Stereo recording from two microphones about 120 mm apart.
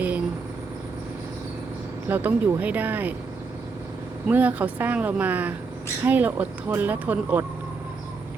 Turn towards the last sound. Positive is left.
turn(degrees=-15)  # may be behind; listen again after turning